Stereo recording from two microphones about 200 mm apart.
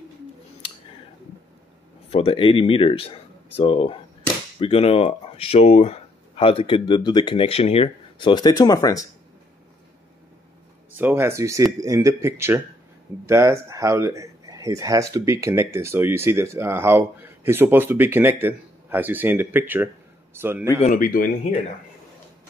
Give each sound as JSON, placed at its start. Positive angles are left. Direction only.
{"t": 2.0, "sound": "speech", "side_deg": 30}
{"t": 11.0, "sound": "speech", "side_deg": -10}
{"t": 20.8, "sound": "speech", "side_deg": 40}